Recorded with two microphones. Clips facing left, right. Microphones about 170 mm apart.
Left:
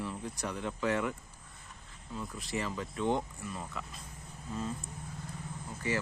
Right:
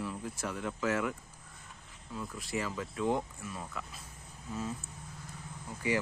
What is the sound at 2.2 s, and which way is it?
Speech, centre (ahead or behind).